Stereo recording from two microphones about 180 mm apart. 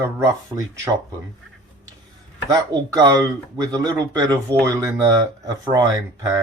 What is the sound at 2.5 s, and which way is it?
Speech, 20° right (ahead or behind).